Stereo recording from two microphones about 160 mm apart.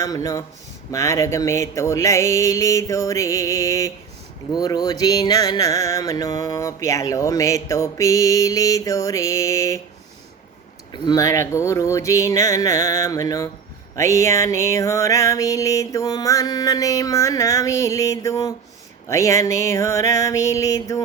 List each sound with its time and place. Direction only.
0.0 s music: 20° left (ahead or behind)
10.9 s music: 25° left (ahead or behind)